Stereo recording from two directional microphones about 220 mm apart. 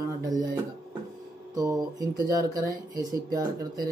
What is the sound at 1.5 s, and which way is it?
A man's voice, 15° right (ahead or behind).